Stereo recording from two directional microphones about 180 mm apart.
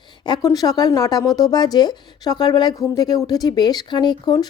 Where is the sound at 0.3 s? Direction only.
20° left (ahead or behind).